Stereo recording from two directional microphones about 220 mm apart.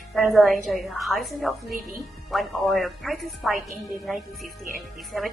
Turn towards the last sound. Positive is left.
turn(degrees=0)  # may be behind; listen again after turning